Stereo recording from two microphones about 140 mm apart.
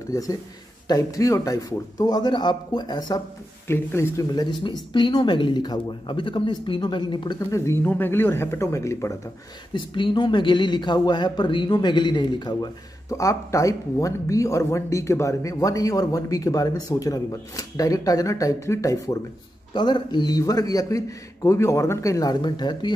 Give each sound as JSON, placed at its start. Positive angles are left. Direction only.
{"t": 0.1, "sound": "speech", "side_deg": 25}
{"t": 3.6, "sound": "speech", "side_deg": 20}
{"t": 9.8, "sound": "speech", "side_deg": 35}